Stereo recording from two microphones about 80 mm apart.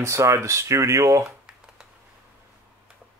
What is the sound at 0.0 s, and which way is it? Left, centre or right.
Speech, right.